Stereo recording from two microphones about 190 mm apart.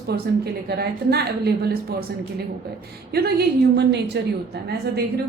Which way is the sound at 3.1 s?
55° right (ahead or behind).